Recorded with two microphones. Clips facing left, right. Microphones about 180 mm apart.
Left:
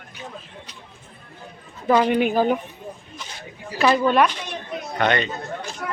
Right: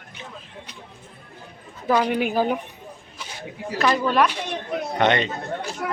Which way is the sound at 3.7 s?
5° left (ahead or behind).